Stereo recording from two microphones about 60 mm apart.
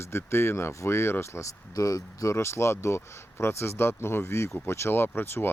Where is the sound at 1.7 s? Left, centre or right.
Left.